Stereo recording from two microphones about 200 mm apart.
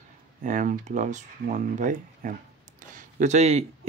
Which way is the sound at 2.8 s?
40° right (ahead or behind).